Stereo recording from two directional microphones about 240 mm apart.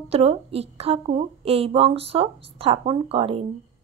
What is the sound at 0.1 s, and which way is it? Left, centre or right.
A woman's voice, right.